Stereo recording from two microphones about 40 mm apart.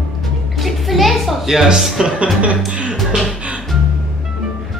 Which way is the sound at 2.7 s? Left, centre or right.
Right.